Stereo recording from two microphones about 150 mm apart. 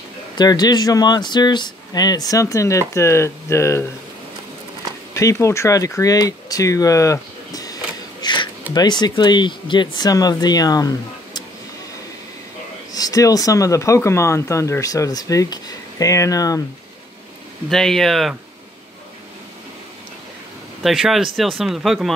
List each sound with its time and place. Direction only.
0.4 s speech: 30° left (ahead or behind)
5.1 s speech: 20° left (ahead or behind)
8.2 s a sound: 30° left (ahead or behind)
8.7 s speech: 30° left (ahead or behind)
12.9 s speech: 25° left (ahead or behind)
17.6 s speech: 5° left (ahead or behind)
20.8 s speech: centre (ahead or behind)